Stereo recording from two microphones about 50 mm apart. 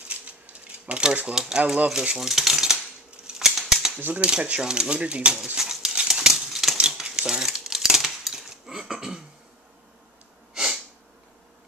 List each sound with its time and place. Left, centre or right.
0.1 s typewriter: right
2.1 s speech: centre
3.1 s scissors: centre
3.4 s typewriter: centre
4.1 s speech: centre
5.6 s pigeon: centre
5.9 s a sound: centre
6.8 s cutlery: centre
10.5 s sneeze: centre